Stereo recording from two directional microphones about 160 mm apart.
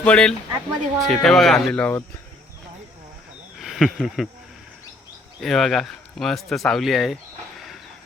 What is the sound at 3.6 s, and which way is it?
Speech, centre (ahead or behind).